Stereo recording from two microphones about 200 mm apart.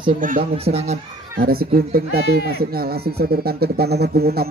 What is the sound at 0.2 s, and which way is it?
Speech, 40° right (ahead or behind).